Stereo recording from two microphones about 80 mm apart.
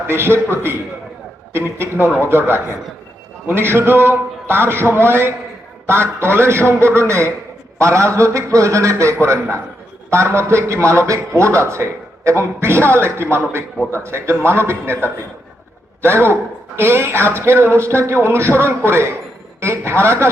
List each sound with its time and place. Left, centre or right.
0.1 s a man's voice: right